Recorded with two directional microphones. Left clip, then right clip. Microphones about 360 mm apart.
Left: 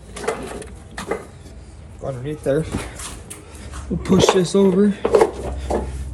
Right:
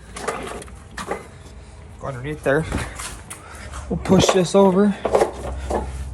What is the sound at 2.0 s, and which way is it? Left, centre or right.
Speech, right.